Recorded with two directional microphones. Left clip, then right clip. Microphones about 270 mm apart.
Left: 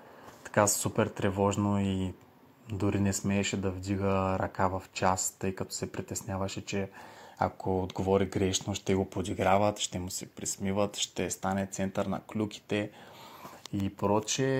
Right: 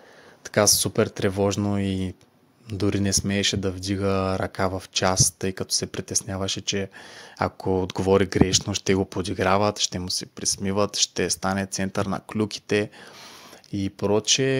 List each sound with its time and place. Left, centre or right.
0.4 s speech: right
13.8 s speech: right